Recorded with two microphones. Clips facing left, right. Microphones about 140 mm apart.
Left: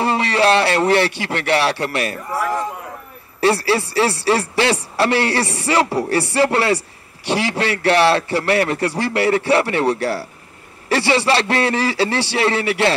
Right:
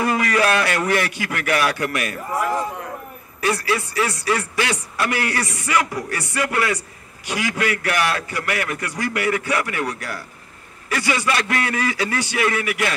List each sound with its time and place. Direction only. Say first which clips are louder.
0.0 s speech: left 3 dB; 30° left (ahead or behind)
3.3 s speech: left 5 dB; 30° left (ahead or behind)